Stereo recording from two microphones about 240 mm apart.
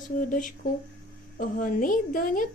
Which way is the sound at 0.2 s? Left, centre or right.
Left.